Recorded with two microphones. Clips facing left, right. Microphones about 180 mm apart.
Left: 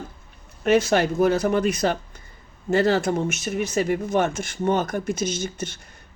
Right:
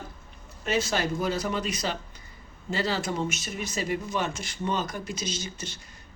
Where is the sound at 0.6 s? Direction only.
60° left (ahead or behind).